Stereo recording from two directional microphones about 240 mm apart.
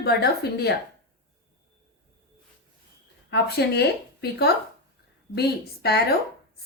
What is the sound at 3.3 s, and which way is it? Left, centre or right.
A woman's voice, left.